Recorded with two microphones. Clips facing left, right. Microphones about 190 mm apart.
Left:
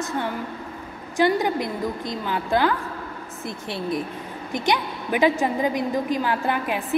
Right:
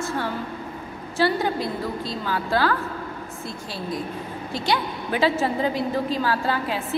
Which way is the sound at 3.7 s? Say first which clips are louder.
Left 2 dB; 25° left (ahead or behind).